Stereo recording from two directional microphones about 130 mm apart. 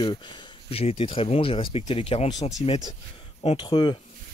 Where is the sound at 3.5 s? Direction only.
35° left (ahead or behind).